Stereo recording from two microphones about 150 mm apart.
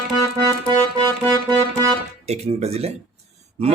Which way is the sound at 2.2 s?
45° right (ahead or behind).